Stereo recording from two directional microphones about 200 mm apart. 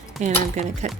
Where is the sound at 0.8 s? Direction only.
35° right (ahead or behind).